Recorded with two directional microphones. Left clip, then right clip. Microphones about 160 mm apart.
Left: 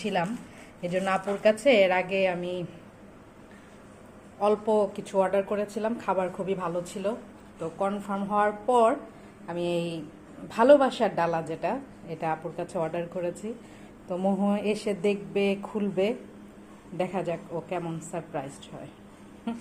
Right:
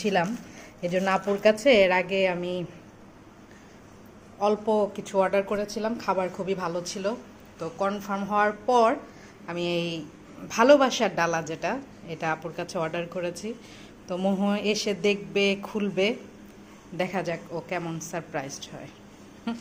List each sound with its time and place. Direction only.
0.0 s a woman's voice: 25° right (ahead or behind)
4.4 s a woman's voice: 5° right (ahead or behind)